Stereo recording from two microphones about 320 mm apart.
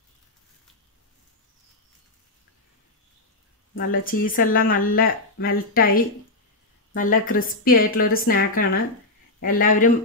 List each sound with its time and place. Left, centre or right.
3.7 s speech: left